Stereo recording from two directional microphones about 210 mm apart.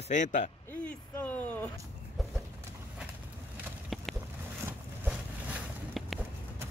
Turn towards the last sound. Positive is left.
turn(degrees=-5)  # may be behind; listen again after turning